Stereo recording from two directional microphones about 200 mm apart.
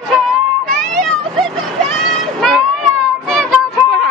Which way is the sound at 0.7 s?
5° left (ahead or behind).